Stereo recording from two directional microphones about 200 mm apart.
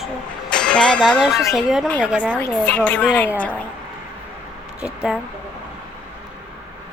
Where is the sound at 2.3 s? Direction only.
5° left (ahead or behind).